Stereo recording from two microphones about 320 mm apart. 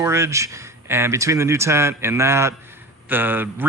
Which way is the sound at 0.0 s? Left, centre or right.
Centre.